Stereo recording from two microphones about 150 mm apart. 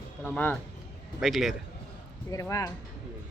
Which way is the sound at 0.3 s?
10° left (ahead or behind).